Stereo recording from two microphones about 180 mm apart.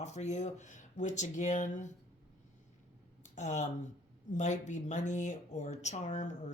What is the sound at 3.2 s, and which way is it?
Speech, 40° left (ahead or behind).